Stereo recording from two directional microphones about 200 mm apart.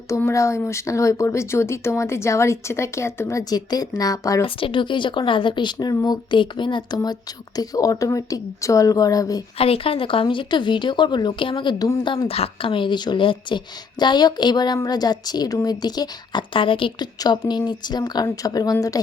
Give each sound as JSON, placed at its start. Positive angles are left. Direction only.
{"t": 0.1, "sound": "speech", "side_deg": 15}
{"t": 9.6, "sound": "speech", "side_deg": 30}